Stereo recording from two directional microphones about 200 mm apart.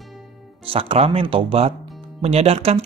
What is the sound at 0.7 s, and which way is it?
Speech, 30° right (ahead or behind).